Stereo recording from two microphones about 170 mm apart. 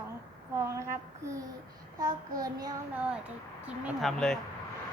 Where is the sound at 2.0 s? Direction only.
25° right (ahead or behind).